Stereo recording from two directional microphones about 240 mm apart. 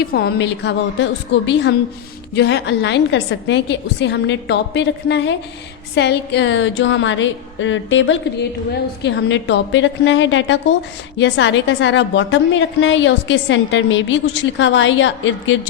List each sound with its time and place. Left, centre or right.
0.0 s a woman's voice: left